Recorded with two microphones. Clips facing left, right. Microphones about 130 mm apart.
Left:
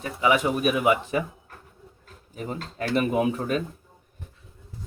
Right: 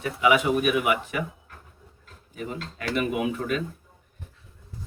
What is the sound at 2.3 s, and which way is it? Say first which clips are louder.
Speech: left 2 dB; 40° left (ahead or behind).